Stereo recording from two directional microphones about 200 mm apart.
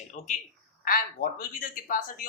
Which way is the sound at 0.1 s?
35° left (ahead or behind).